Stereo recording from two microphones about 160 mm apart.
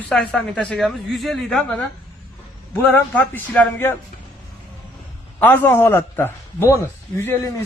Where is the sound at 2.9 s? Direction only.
10° left (ahead or behind).